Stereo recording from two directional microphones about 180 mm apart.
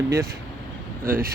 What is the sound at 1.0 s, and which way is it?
Speech, 50° right (ahead or behind).